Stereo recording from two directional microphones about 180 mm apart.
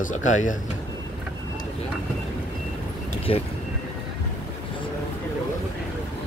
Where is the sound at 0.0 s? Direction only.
45° left (ahead or behind).